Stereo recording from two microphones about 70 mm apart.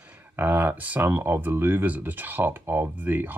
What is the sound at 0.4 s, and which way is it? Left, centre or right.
Speech, right.